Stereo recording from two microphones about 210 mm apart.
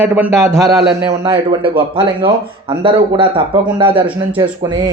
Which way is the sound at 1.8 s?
25° right (ahead or behind).